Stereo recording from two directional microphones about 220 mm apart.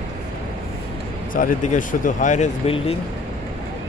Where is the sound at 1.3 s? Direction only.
35° left (ahead or behind).